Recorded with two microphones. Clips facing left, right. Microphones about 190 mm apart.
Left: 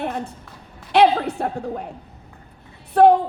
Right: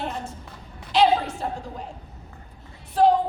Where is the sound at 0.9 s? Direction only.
60° left (ahead or behind).